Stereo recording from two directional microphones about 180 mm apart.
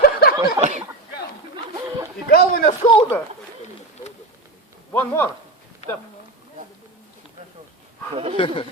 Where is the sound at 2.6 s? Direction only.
30° left (ahead or behind).